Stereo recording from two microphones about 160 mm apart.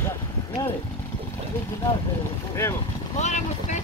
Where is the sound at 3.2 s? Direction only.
50° left (ahead or behind).